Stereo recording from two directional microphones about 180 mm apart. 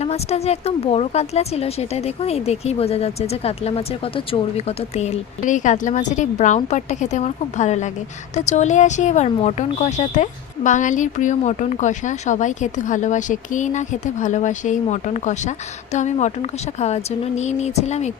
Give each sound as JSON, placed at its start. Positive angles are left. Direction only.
{"t": 0.0, "sound": "speech", "side_deg": 35}